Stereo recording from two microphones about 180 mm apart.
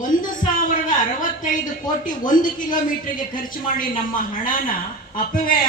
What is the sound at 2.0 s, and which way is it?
A man's voice, 50° left (ahead or behind).